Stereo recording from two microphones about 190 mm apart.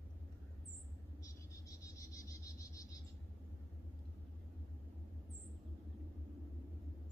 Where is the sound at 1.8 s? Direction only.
15° left (ahead or behind).